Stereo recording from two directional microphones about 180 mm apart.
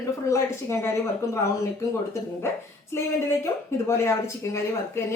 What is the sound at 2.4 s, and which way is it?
A woman's voice, 15° left (ahead or behind).